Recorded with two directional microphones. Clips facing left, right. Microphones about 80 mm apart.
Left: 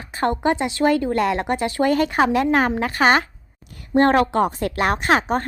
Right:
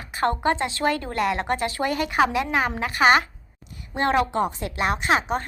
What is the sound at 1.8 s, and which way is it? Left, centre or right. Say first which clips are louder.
A woman's voice: left 4 dB; left.